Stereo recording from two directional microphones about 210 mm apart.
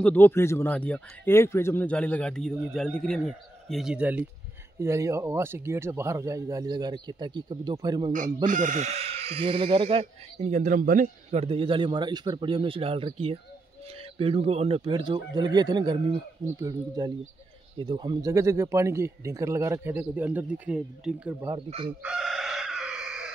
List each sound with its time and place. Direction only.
0.0 s a man's voice: 10° left (ahead or behind); by 8.1 s 20° right (ahead or behind)
8.5 s speech: 35° right (ahead or behind); by 21.5 s 5° right (ahead or behind)
21.6 s speech: 25° right (ahead or behind)
22.0 s chicken: centre (ahead or behind)